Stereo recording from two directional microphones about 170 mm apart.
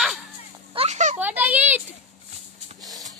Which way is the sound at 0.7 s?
40° right (ahead or behind).